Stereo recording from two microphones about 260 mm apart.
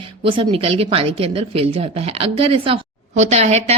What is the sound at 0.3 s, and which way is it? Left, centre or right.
A woman's voice, centre.